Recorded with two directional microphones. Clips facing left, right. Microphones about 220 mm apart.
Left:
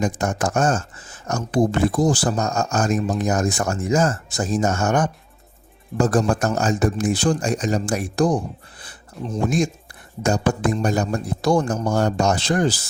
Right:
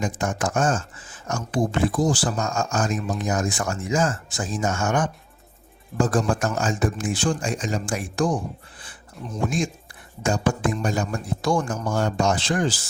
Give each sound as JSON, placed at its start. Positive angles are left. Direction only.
{"t": 0.0, "sound": "speech", "side_deg": 40}
{"t": 10.2, "sound": "speech", "side_deg": 40}